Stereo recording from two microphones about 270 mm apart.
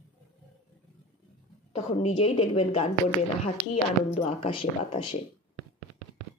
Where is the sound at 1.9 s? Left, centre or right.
Left.